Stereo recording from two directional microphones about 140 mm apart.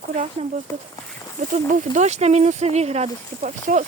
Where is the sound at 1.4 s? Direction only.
65° right (ahead or behind).